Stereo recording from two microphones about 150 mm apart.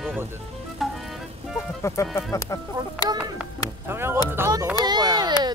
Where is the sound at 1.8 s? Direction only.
20° left (ahead or behind).